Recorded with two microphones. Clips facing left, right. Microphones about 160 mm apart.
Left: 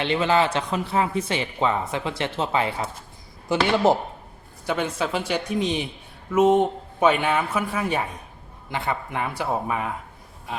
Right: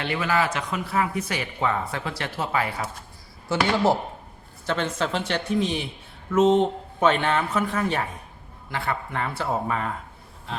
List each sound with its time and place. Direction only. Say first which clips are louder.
0.0 s speech: left 4 dB; 25° left (ahead or behind)